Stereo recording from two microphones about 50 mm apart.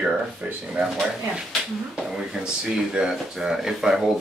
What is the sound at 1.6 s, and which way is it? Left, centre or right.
Speech, centre.